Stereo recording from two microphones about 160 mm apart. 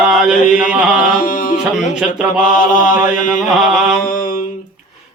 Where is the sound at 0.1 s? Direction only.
5° right (ahead or behind).